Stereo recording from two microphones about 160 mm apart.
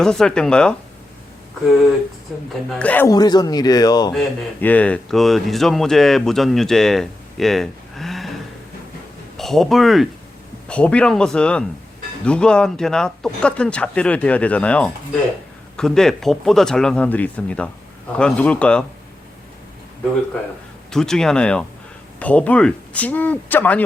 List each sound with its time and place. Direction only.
0.0 s speech: 5° left (ahead or behind)
2.3 s speech: centre (ahead or behind)
3.1 s speech: 25° left (ahead or behind)
4.1 s speech: 5° left (ahead or behind)
9.4 s speech: centre (ahead or behind)
20.9 s speech: 5° left (ahead or behind)